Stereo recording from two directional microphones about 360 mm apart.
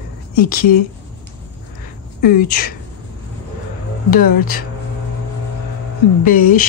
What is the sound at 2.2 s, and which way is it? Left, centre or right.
Speech, left.